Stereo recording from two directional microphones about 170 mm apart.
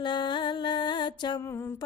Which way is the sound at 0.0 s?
25° left (ahead or behind).